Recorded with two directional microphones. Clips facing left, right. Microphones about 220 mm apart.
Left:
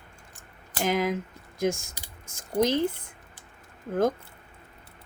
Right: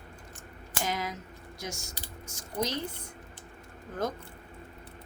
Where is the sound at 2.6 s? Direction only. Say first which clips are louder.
Left 10 dB; 90° left.